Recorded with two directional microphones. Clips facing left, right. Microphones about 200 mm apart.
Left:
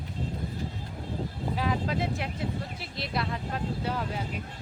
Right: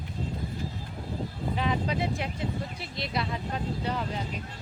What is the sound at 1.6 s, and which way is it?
Speech, centre (ahead or behind).